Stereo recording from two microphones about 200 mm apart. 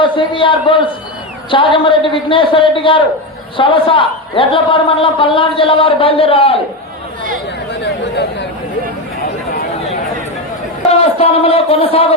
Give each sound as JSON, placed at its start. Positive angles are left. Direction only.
{"t": 0.0, "sound": "a man's voice", "side_deg": 25}
{"t": 7.7, "sound": "speech", "side_deg": 60}
{"t": 11.2, "sound": "a man's voice", "side_deg": 30}